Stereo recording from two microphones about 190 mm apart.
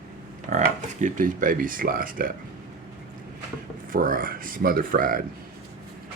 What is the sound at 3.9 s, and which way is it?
Speech, 45° right (ahead or behind).